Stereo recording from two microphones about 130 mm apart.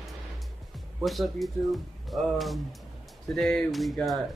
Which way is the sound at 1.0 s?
Centre (ahead or behind).